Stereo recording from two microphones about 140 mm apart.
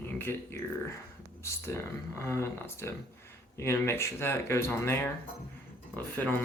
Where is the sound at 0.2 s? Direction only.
15° left (ahead or behind).